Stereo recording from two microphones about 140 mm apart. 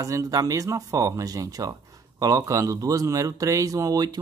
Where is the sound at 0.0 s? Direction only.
25° right (ahead or behind).